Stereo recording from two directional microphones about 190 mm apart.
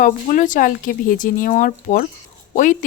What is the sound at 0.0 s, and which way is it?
Speech, 45° left (ahead or behind).